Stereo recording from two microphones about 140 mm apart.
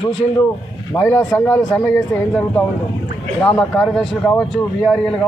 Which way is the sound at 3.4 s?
10° left (ahead or behind).